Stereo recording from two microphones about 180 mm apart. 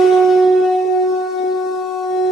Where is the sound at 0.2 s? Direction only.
Centre (ahead or behind).